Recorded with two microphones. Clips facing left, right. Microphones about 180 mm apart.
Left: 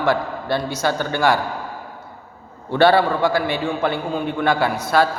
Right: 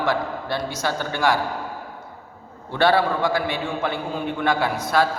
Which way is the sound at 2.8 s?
Centre (ahead or behind).